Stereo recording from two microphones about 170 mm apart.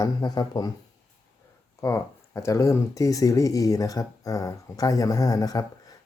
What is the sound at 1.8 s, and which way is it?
Speech, 15° left (ahead or behind).